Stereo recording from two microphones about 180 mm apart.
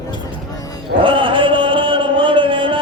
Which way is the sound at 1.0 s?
30° right (ahead or behind).